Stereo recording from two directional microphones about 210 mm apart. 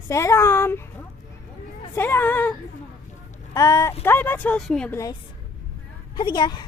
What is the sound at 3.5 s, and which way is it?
A woman's voice, 15° left (ahead or behind).